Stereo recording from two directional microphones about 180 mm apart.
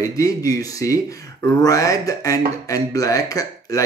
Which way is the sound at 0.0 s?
20° left (ahead or behind).